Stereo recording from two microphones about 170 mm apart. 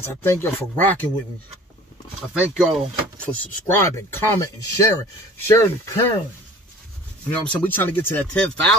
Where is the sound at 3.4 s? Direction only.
10° left (ahead or behind).